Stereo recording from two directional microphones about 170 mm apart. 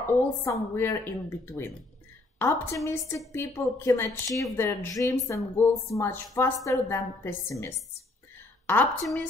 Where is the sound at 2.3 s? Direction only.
15° left (ahead or behind).